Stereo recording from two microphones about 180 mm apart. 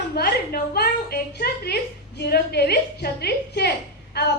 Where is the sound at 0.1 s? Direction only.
60° left (ahead or behind).